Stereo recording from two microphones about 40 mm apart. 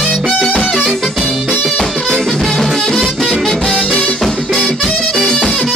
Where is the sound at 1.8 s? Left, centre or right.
Centre.